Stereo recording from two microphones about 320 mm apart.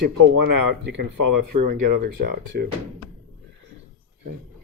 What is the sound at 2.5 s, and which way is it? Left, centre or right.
Speech, right.